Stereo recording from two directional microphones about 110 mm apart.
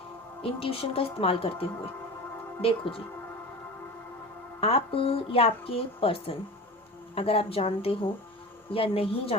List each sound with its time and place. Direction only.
0.4 s a woman's voice: 60° left (ahead or behind)
4.6 s a woman's voice: 60° left (ahead or behind)